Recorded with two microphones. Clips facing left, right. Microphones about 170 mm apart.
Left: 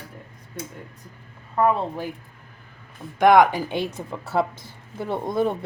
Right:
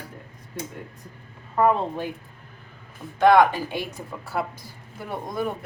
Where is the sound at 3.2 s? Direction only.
15° left (ahead or behind).